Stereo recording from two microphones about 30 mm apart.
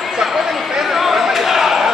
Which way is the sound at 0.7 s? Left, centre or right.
Centre.